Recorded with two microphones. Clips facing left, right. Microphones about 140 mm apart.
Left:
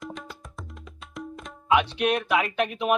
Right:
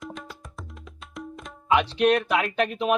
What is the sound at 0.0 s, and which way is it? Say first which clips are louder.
Tabla: even; centre (ahead or behind).